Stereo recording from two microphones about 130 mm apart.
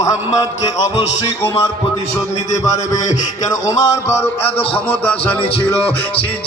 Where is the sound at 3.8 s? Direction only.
25° left (ahead or behind).